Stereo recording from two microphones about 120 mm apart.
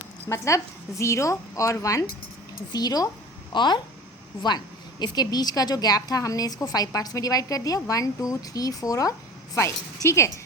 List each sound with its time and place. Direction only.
0.3 s a woman's voice: 25° left (ahead or behind)